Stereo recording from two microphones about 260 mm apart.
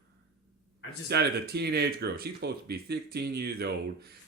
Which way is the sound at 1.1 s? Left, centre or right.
Right.